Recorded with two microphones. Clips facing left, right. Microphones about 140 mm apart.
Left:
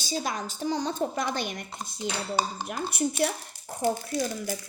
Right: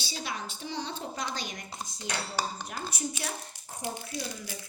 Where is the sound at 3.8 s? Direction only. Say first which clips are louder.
Left 9 dB; 45° left (ahead or behind).